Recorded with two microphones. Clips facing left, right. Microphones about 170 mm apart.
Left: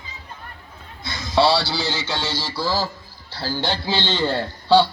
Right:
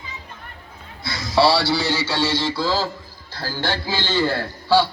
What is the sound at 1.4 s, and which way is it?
A man's voice, centre (ahead or behind).